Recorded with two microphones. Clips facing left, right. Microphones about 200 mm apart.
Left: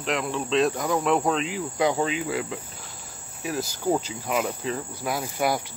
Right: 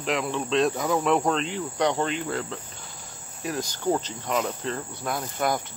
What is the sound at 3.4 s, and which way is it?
Insect, 5° left (ahead or behind).